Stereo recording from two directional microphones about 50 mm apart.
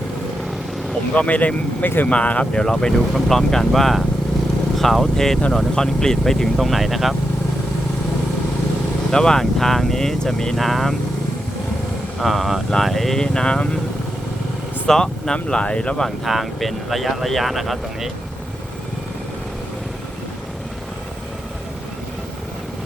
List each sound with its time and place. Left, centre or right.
1.1 s speech: left; by 7.2 s centre
9.1 s speech: centre
10.6 s speech: centre
12.2 s speech: centre
13.2 s speech: centre
14.8 s speech: centre
16.0 s speech: centre